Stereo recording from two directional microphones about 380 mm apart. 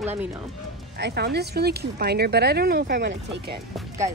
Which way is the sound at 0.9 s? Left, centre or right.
Right.